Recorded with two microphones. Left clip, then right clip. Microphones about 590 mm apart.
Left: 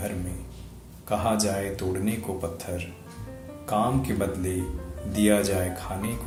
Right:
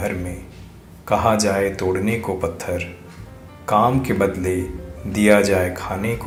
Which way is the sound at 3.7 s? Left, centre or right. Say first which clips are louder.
Right 9 dB; left.